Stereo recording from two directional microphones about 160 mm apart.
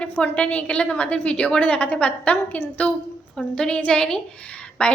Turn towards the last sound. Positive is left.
turn(degrees=5)  # may be behind; listen again after turning